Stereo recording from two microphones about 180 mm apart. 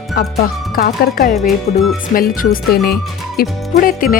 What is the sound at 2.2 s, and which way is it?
Speech, 50° left (ahead or behind).